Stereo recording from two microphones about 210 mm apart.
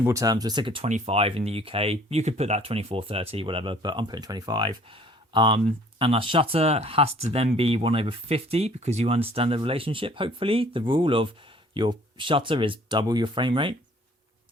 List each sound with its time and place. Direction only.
0.0 s speech: 15° right (ahead or behind)